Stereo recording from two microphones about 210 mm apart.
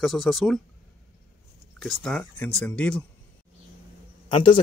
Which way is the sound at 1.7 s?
Centre (ahead or behind).